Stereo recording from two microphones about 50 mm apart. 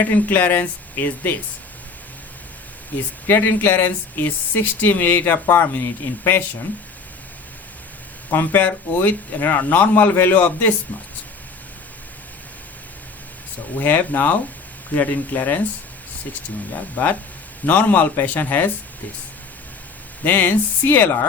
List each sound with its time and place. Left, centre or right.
0.0 s speech: left
3.2 s speech: left
6.1 s speech: left
8.3 s speech: left
13.7 s speech: left
17.0 s speech: left
20.2 s speech: left